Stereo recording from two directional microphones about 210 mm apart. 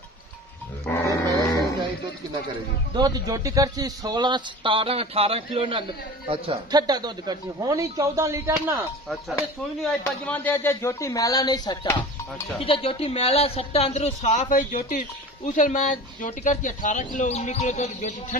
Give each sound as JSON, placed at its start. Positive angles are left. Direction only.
{"t": 0.9, "sound": "music", "side_deg": 15}
{"t": 2.9, "sound": "a man's voice", "side_deg": -20}
{"t": 10.0, "sound": "speech", "side_deg": 10}